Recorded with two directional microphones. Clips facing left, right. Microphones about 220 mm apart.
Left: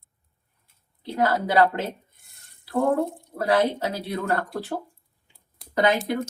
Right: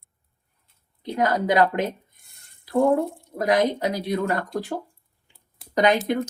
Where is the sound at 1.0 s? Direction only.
15° right (ahead or behind).